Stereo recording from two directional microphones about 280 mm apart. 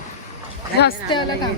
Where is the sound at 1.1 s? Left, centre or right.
Centre.